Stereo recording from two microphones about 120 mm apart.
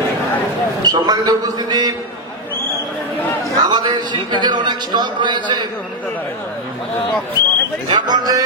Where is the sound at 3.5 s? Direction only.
35° right (ahead or behind).